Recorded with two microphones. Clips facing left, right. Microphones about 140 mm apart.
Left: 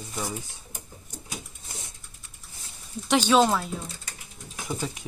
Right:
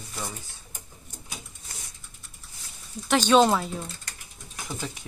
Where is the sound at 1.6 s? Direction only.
25° left (ahead or behind).